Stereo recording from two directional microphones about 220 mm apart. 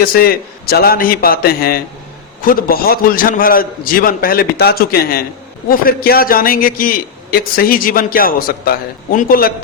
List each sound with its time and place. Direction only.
0.0 s a man's voice: 45° left (ahead or behind)